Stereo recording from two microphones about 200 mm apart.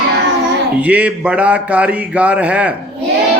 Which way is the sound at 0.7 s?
5° right (ahead or behind).